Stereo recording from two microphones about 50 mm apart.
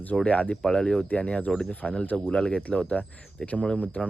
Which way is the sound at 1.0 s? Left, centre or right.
Left.